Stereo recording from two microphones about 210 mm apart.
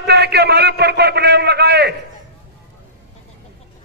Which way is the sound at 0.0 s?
50° right (ahead or behind).